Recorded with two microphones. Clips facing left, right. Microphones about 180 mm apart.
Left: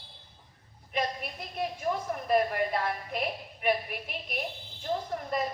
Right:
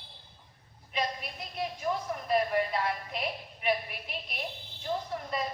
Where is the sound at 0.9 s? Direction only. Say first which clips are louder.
Left 2 dB; 50° left (ahead or behind).